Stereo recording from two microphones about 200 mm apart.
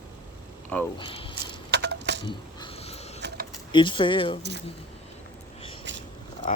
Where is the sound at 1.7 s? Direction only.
60° right (ahead or behind).